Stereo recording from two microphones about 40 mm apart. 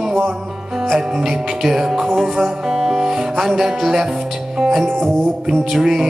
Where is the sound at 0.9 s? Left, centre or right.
Centre.